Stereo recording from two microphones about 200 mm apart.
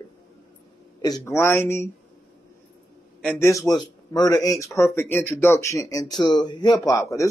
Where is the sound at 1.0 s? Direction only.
15° left (ahead or behind).